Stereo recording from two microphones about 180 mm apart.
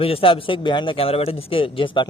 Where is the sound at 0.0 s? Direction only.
30° left (ahead or behind).